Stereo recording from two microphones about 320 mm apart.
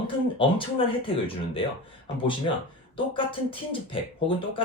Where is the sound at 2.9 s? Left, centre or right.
Centre.